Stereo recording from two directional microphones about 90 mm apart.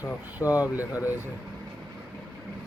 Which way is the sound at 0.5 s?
15° right (ahead or behind).